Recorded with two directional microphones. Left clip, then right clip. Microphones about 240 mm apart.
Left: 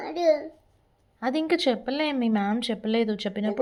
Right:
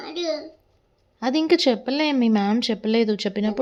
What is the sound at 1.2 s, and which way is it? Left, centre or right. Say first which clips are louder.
Speech: right 5 dB; centre.